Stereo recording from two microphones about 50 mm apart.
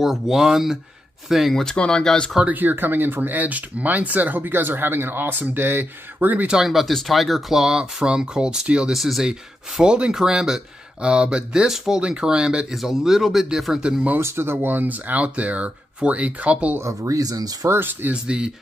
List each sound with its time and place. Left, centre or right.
0.0 s speech: centre
1.5 s speech: centre
2.4 s speech: right
6.6 s speech: centre
7.6 s speech: centre
8.9 s speech: centre
9.3 s speech: centre
11.7 s speech: centre
12.7 s speech: centre
14.1 s speech: right
17.6 s speech: right
18.1 s speech: centre